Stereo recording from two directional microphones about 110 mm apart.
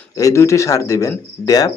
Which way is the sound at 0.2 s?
30° left (ahead or behind).